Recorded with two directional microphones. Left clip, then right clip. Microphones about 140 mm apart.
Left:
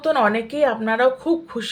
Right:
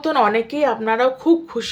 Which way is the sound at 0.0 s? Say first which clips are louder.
Right 1 dB; 35° right (ahead or behind).